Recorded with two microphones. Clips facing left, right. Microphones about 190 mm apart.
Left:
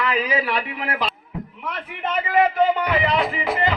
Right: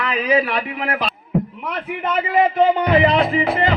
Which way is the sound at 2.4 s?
25° right (ahead or behind).